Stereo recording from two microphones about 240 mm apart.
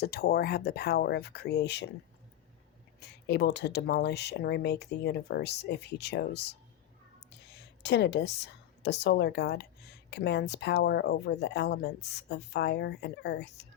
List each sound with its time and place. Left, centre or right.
0.0 s speech: left
3.0 s speech: left